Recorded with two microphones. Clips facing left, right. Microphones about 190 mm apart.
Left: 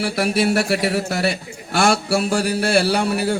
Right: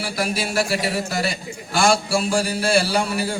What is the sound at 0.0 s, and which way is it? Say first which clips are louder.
A man's voice: left 6 dB; 65° left (ahead or behind).